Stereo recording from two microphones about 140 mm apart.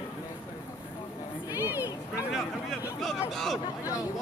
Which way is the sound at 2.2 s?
Centre (ahead or behind).